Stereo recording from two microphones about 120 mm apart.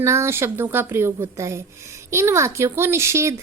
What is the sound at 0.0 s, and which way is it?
A woman's voice, 25° right (ahead or behind).